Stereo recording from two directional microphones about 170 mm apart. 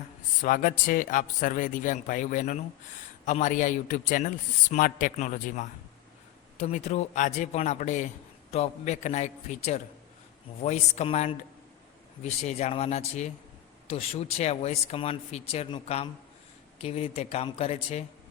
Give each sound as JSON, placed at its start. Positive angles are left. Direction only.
{"t": 0.4, "sound": "a man's voice", "side_deg": 50}